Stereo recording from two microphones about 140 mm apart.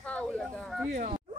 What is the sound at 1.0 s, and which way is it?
Speech, 55° right (ahead or behind).